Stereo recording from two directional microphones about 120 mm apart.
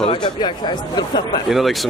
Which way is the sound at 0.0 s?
45° left (ahead or behind).